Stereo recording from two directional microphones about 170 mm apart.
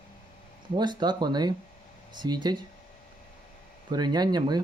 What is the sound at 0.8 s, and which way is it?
Speech, 25° right (ahead or behind).